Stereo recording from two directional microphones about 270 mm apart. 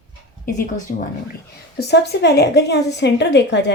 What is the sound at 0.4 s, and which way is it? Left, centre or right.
A woman's voice, left.